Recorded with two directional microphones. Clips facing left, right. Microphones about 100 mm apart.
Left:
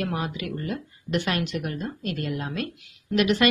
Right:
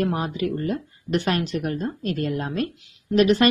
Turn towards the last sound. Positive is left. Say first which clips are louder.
# right 4 dB
turn(degrees=-35)  # may be behind; listen again after turning